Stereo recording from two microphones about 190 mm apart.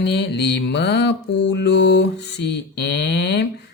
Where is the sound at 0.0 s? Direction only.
65° left (ahead or behind).